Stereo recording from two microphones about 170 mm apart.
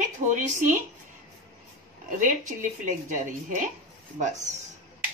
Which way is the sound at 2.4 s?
50° right (ahead or behind).